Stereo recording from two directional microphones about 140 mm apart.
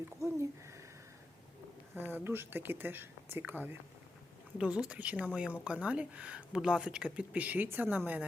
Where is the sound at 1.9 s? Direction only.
15° right (ahead or behind).